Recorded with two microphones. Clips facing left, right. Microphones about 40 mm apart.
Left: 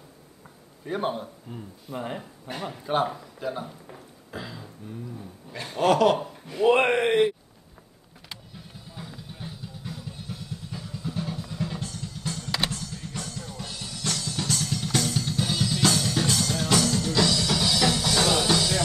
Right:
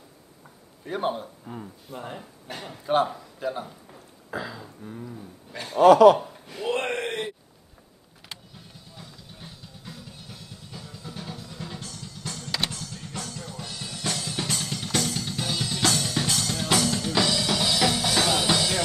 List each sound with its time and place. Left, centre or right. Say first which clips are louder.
0.8 s speech: even; centre
2.0 s speech: left 4 dB; centre
2.6 s speech: right 2 dB; centre
4.3 s a sound: right 4 dB; centre
5.5 s a man's voice: right 7 dB; centre
6.6 s speech: left 7 dB; left
8.7 s music: left 6 dB; centre
13.8 s music: right 1 dB; right